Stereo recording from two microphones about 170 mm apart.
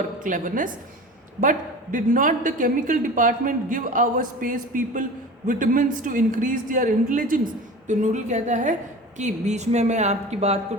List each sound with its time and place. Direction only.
0.2 s a woman's voice: 50° right (ahead or behind)